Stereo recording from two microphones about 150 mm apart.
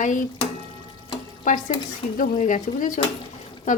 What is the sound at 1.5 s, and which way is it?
Speech, 60° left (ahead or behind).